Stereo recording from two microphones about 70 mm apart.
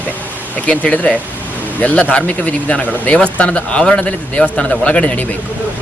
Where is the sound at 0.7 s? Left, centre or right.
Left.